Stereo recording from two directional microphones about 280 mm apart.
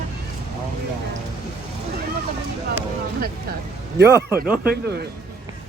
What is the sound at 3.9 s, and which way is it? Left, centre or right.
Speech, centre.